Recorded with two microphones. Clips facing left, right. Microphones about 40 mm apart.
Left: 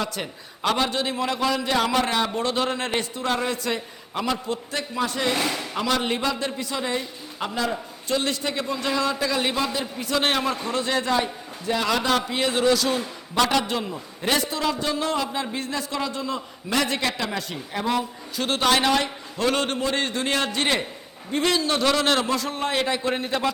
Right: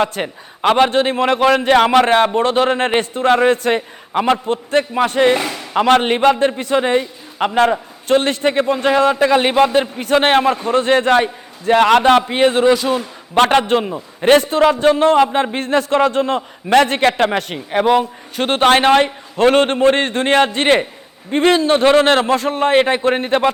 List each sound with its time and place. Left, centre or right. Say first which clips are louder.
0.0 s a man's voice: right 10 dB; right
13.3 s a man's voice: right 9 dB; right